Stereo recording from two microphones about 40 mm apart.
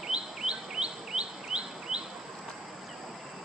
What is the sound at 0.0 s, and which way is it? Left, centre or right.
Chirp, centre.